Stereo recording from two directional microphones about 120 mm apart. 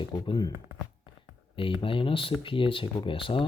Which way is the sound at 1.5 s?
45° left (ahead or behind).